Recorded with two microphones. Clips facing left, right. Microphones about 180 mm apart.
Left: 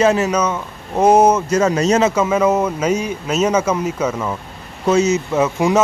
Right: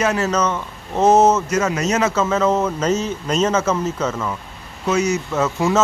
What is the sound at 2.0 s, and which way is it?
Speech, 15° left (ahead or behind).